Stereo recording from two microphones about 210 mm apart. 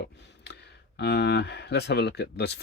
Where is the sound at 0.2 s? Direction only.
55° left (ahead or behind).